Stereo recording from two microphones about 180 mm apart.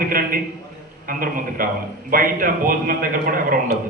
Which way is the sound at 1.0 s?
50° right (ahead or behind).